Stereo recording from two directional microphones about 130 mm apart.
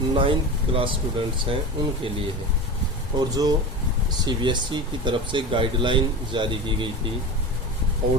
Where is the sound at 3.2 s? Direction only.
30° right (ahead or behind).